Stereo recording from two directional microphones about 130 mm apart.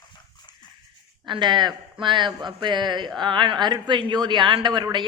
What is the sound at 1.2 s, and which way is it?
A man's voice, 35° right (ahead or behind).